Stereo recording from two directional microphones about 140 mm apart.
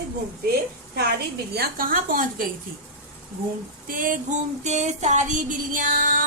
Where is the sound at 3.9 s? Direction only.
75° right (ahead or behind).